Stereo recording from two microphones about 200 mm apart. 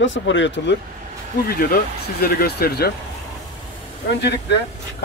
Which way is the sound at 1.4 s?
50° left (ahead or behind).